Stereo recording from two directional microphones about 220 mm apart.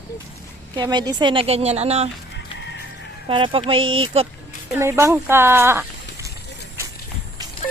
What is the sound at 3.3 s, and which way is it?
A woman's voice, 25° right (ahead or behind).